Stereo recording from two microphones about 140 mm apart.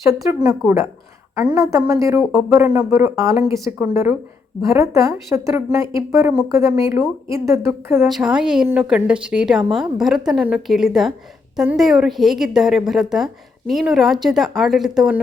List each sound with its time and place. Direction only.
0.0 s speech: 20° right (ahead or behind)
1.5 s speech: 25° right (ahead or behind)
5.3 s speech: 20° right (ahead or behind)
8.0 s a woman's voice: 5° right (ahead or behind)